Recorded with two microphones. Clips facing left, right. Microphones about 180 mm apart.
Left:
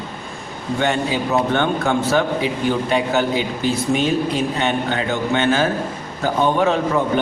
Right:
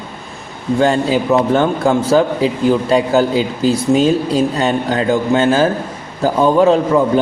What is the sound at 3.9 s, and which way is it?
Speech, 30° right (ahead or behind).